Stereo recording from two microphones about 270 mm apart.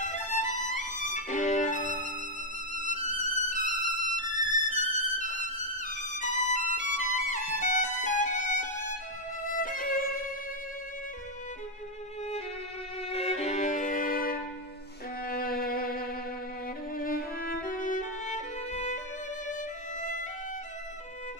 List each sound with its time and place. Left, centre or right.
1.0 s violin: left
13.1 s violin: left
15.2 s music: left